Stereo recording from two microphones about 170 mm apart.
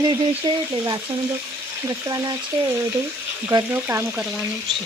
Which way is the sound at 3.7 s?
15° right (ahead or behind).